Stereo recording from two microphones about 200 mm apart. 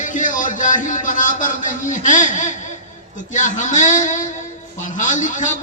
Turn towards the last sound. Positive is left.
turn(degrees=40)  # may be behind; listen again after turning